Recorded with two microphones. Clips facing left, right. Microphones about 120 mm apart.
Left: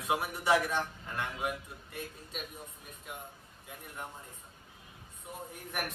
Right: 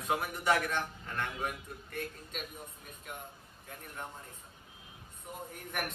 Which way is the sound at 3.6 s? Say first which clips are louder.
Even; 10° left (ahead or behind).